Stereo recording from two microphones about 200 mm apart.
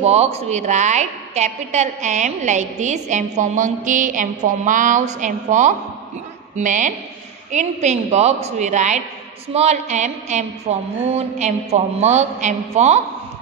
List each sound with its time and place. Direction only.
0.0 s a woman's voice: 30° right (ahead or behind)